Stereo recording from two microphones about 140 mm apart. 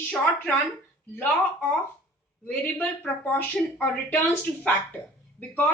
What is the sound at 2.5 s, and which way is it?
A woman's voice, 10° left (ahead or behind).